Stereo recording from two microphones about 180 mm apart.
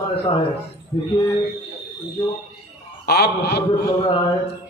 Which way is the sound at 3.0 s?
65° left (ahead or behind).